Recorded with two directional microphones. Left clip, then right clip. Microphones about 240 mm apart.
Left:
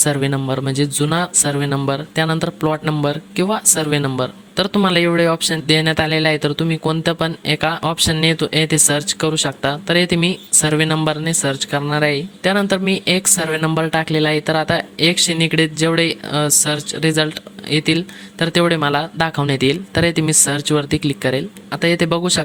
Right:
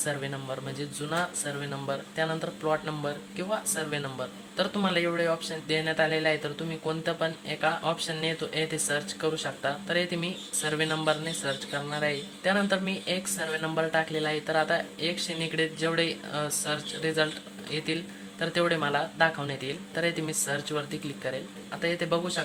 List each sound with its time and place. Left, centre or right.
0.0 s a man's voice: left